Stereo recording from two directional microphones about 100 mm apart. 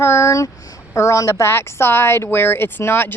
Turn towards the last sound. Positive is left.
turn(degrees=25)  # may be behind; listen again after turning